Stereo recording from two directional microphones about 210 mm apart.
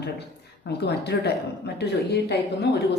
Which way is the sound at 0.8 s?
50° left (ahead or behind).